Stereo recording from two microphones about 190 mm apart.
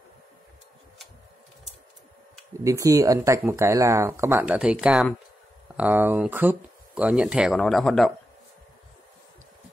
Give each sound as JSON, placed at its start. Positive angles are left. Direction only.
{"t": 2.6, "sound": "speech", "side_deg": -15}